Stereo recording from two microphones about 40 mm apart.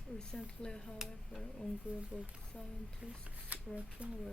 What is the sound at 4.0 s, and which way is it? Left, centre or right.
Speech, right.